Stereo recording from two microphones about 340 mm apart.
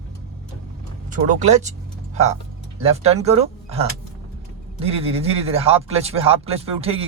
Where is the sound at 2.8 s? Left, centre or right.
Centre.